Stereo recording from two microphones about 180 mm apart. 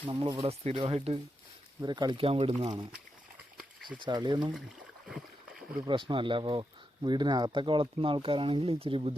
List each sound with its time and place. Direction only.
0.0 s speech: 25° right (ahead or behind)
1.8 s speech: 25° right (ahead or behind)
4.0 s speech: 25° right (ahead or behind)
5.0 s boat: centre (ahead or behind)
5.8 s speech: 25° right (ahead or behind)